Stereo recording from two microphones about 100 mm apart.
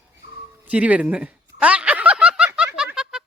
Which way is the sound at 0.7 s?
10° right (ahead or behind).